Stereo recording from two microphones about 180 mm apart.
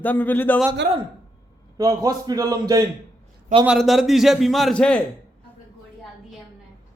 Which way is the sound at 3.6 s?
Centre (ahead or behind).